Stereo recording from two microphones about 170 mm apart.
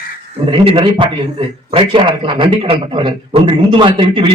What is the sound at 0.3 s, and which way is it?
A man's voice, 35° right (ahead or behind).